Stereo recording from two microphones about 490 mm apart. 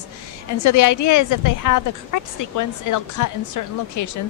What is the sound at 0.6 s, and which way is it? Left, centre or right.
A woman's voice, left.